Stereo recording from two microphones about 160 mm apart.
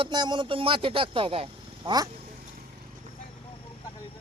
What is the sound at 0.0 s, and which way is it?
A man's voice, 25° right (ahead or behind).